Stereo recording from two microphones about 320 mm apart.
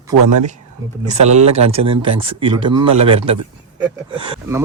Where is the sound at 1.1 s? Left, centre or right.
Right.